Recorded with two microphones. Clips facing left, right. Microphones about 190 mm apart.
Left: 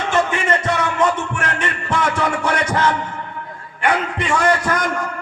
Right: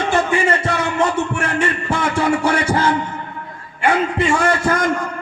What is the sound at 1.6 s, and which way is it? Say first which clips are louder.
Music: right 1 dB; 30° right (ahead or behind).